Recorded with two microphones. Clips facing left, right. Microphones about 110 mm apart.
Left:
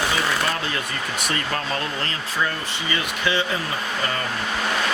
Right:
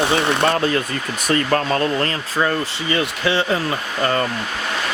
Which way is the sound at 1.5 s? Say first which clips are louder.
Right 8 dB; 50° right (ahead or behind).